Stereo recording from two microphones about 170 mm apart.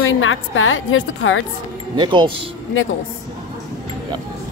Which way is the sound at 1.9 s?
25° right (ahead or behind).